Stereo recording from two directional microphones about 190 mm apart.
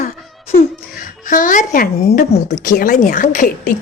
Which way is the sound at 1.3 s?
45° left (ahead or behind).